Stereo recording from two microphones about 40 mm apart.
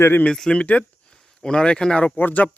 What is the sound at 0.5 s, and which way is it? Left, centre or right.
Speech, left.